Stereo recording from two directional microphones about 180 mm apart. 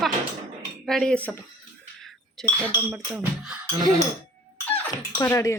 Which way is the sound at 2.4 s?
Centre (ahead or behind).